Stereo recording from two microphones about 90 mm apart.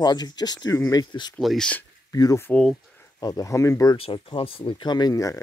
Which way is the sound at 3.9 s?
80° left.